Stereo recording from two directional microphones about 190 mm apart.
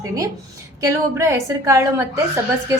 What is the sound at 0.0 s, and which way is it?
A woman's voice, 15° right (ahead or behind).